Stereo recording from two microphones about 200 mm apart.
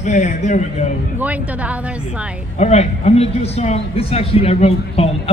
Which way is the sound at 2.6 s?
35° left (ahead or behind).